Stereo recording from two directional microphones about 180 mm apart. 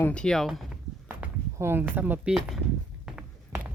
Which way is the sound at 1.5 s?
15° right (ahead or behind).